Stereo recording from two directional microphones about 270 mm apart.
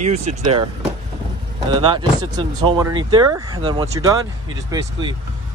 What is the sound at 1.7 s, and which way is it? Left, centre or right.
Speech, centre.